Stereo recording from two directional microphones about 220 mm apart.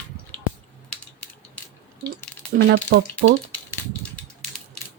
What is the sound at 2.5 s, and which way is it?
Speech, 50° right (ahead or behind).